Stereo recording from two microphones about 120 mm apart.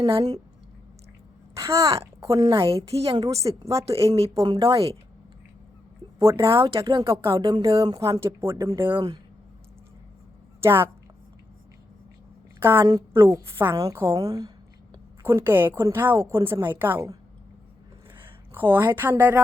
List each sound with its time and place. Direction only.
0.0 s a woman's voice: 35° right (ahead or behind)
1.5 s a woman's voice: 25° right (ahead or behind)
2.6 s a woman's voice: 55° right (ahead or behind)
3.1 s a woman's voice: 30° right (ahead or behind)
6.4 s a woman's voice: 25° right (ahead or behind)
6.8 s a woman's voice: 45° right (ahead or behind)
7.6 s a woman's voice: 25° right (ahead or behind)
9.0 s a woman's voice: 35° right (ahead or behind)
10.6 s a woman's voice: 20° right (ahead or behind)
12.5 s a woman's voice: 20° right (ahead or behind)
18.2 s speech: 20° right (ahead or behind)